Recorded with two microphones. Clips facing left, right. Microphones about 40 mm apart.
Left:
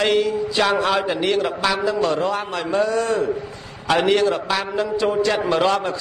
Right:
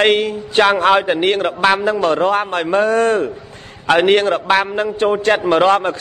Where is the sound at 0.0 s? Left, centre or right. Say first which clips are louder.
Right 4 dB; right.